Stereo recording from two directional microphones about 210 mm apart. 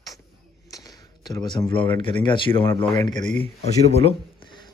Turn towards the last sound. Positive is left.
turn(degrees=20)  # may be behind; listen again after turning